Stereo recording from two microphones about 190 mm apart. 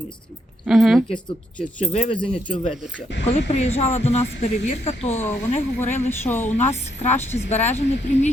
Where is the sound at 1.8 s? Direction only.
30° left (ahead or behind).